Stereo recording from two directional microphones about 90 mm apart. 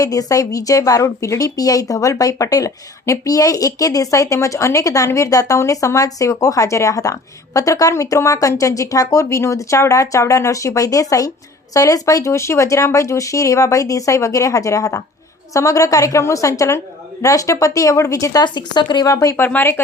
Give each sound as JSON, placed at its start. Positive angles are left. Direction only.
{"t": 0.0, "sound": "speech", "side_deg": 40}
{"t": 18.4, "sound": "speech", "side_deg": 55}
{"t": 19.0, "sound": "speech", "side_deg": 40}
{"t": 19.5, "sound": "speech", "side_deg": 25}